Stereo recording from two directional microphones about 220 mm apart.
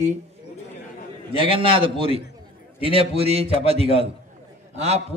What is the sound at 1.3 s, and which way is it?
A man's voice, 25° right (ahead or behind).